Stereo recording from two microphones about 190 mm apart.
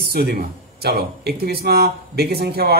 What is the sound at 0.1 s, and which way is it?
Speech, 55° right (ahead or behind).